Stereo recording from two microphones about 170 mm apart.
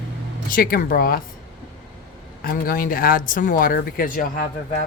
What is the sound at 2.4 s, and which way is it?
Speech, 55° left (ahead or behind).